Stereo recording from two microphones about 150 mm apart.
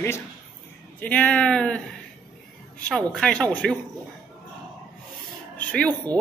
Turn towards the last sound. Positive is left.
turn(degrees=10)  # may be behind; listen again after turning